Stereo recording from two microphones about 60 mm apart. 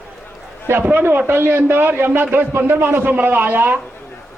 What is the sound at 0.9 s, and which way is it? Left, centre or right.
A man's voice, right.